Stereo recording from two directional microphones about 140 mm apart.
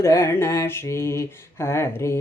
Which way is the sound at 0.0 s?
20° left (ahead or behind).